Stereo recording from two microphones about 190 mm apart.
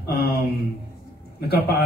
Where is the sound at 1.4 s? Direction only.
55° left (ahead or behind).